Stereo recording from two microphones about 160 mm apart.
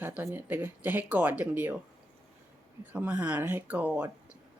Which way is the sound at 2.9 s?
10° right (ahead or behind).